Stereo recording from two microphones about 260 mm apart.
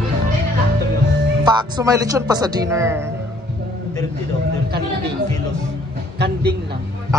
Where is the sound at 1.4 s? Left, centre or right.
Centre.